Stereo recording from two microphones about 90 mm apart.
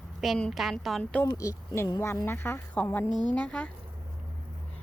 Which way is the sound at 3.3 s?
10° left (ahead or behind).